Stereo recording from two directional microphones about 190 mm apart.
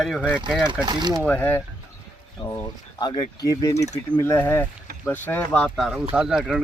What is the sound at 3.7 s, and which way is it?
Speech, 35° left (ahead or behind).